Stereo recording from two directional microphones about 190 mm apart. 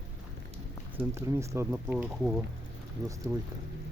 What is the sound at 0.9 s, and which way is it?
Speech, 10° right (ahead or behind).